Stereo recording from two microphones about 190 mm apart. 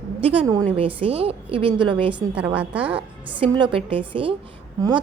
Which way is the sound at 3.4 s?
25° right (ahead or behind).